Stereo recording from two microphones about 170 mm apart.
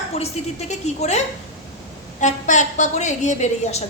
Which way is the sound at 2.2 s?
45° left (ahead or behind).